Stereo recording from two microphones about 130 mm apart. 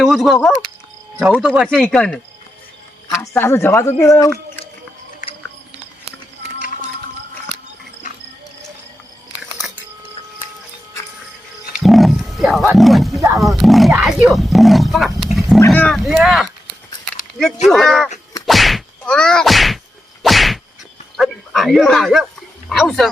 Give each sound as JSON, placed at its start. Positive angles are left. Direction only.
{"t": 0.0, "sound": "speech", "side_deg": 0}
{"t": 3.2, "sound": "speech", "side_deg": 15}
{"t": 8.0, "sound": "cricket", "side_deg": 75}
{"t": 11.7, "sound": "roaring cats", "side_deg": 0}
{"t": 12.7, "sound": "speech", "side_deg": 0}
{"t": 15.7, "sound": "speech", "side_deg": 10}
{"t": 16.0, "sound": "speech", "side_deg": 0}
{"t": 17.7, "sound": "speech", "side_deg": 0}
{"t": 18.4, "sound": "whack", "side_deg": 0}
{"t": 21.2, "sound": "speech", "side_deg": 0}